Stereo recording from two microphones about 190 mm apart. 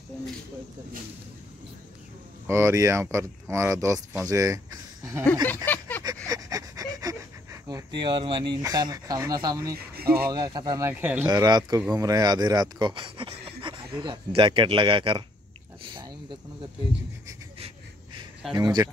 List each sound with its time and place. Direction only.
2.4 s speech: 15° right (ahead or behind)
5.7 s a sound: 10° left (ahead or behind)
6.2 s pant: 20° right (ahead or behind)
8.6 s speech: 20° right (ahead or behind)
9.9 s speech: 55° right (ahead or behind)
10.3 s speech: 20° right (ahead or behind)
11.2 s speech: 20° right (ahead or behind)
15.8 s a sound: 25° right (ahead or behind)
18.6 s speech: 20° right (ahead or behind)